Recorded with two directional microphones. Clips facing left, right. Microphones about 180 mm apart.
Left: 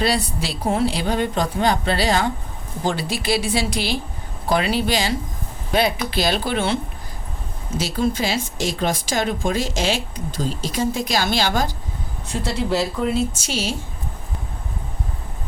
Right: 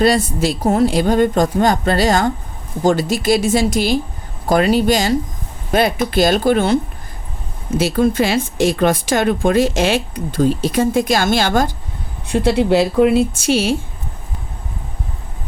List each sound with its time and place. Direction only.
0.0 s speech: 45° right (ahead or behind)
7.7 s speech: 55° right (ahead or behind)
12.3 s speech: 60° right (ahead or behind)